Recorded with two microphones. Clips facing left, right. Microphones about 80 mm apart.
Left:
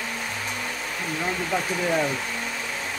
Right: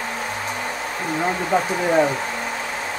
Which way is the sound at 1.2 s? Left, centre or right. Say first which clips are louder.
Right 6 dB; right.